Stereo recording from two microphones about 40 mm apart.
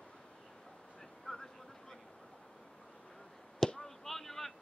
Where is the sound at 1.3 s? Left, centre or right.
Left.